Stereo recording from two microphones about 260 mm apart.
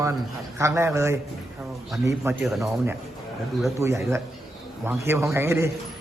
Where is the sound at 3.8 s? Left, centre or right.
Centre.